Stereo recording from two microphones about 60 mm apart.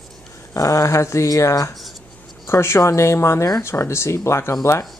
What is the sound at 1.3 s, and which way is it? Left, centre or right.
Speech, left.